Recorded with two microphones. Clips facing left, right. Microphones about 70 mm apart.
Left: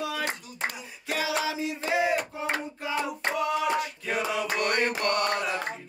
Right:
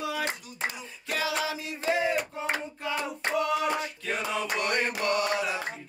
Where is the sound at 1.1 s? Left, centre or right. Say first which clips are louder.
Left 1 dB; left.